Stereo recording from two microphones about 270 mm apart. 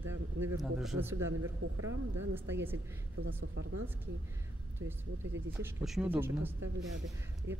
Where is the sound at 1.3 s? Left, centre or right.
Right.